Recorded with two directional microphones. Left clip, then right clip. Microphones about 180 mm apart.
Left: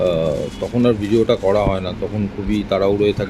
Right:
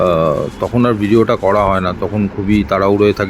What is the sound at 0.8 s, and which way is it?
Speech, 15° right (ahead or behind).